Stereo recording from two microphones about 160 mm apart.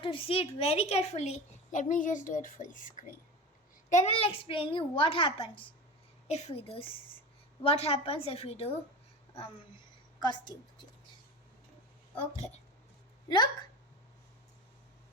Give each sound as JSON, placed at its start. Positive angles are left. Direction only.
{"t": 0.0, "sound": "a woman's voice", "side_deg": 35}
{"t": 10.2, "sound": "a woman's voice", "side_deg": 25}
{"t": 13.2, "sound": "speech", "side_deg": 30}